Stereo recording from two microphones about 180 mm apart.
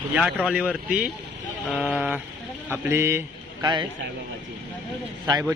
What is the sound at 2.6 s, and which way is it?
A man's voice, 10° right (ahead or behind).